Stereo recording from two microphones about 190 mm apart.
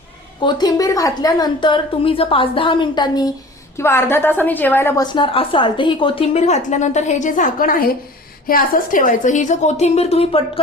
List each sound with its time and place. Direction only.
0.4 s a woman's voice: 20° left (ahead or behind)
5.1 s a woman's voice: 30° left (ahead or behind)